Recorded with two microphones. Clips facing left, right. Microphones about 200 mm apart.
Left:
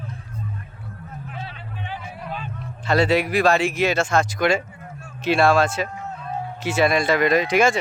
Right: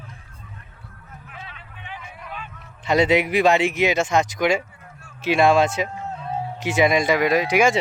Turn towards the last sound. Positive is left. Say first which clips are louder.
# even
turn(degrees=-10)  # may be behind; listen again after turning